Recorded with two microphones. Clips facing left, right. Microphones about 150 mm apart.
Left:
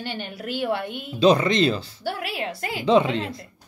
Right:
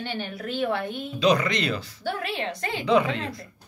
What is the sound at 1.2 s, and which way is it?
Speech, 30° left (ahead or behind).